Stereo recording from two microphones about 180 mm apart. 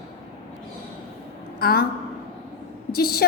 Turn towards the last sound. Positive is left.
turn(degrees=60)  # may be behind; listen again after turning